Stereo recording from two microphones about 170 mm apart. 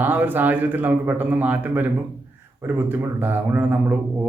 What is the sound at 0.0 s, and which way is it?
Speech, 10° right (ahead or behind).